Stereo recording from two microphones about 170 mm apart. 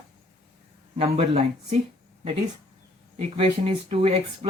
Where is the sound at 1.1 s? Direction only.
40° right (ahead or behind).